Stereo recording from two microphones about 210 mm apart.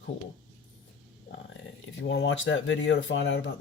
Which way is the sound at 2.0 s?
60° left (ahead or behind).